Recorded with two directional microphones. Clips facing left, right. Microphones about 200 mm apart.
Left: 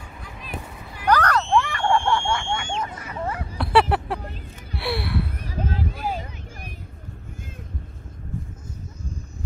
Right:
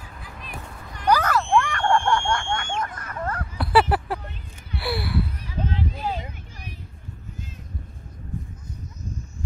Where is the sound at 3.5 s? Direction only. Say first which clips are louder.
Left 1 dB; centre (ahead or behind).